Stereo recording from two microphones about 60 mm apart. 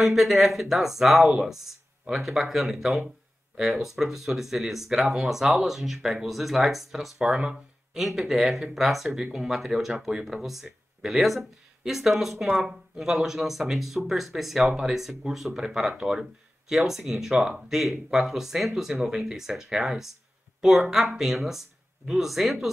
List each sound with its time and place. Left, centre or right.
0.0 s speech: centre
7.2 s speech: centre